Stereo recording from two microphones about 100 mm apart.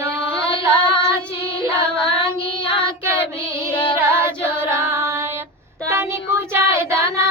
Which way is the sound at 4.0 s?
25° right (ahead or behind).